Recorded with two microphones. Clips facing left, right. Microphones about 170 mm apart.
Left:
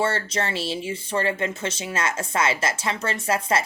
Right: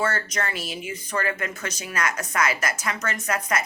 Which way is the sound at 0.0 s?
30° left (ahead or behind).